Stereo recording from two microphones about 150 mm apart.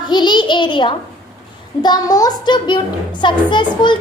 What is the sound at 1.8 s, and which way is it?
A child's voice, 25° left (ahead or behind).